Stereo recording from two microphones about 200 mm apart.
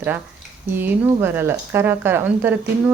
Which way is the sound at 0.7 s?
10° right (ahead or behind).